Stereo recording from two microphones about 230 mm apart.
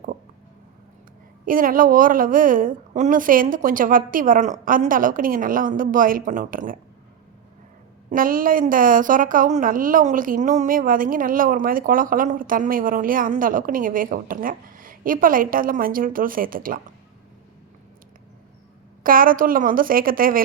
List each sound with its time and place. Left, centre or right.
1.5 s a woman's voice: right
8.1 s a woman's voice: right
19.0 s a woman's voice: right